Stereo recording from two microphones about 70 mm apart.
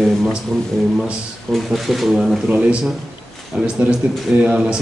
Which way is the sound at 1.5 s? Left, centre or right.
Centre.